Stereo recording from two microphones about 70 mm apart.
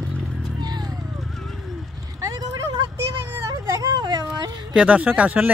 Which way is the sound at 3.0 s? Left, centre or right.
Right.